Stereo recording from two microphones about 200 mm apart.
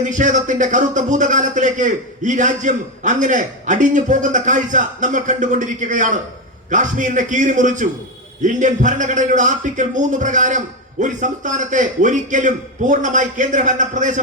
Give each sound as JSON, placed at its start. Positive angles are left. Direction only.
{"t": 0.0, "sound": "a man's voice", "side_deg": -40}